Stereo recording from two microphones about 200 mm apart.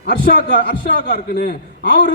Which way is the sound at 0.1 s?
50° left (ahead or behind).